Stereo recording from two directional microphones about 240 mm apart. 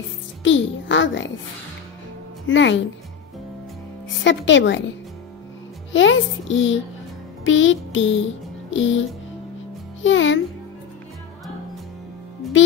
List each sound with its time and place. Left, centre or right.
0.4 s a sound: left
2.4 s a child's voice: left
4.2 s a child's voice: left
5.9 s a child's voice: left
7.4 s music: left
10.0 s a child's voice: left
12.6 s a child's voice: left